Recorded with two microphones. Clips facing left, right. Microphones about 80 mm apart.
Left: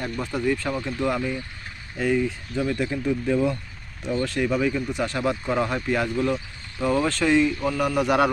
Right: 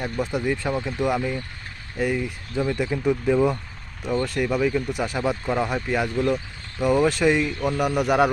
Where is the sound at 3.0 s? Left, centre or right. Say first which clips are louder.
Right 4 dB; centre.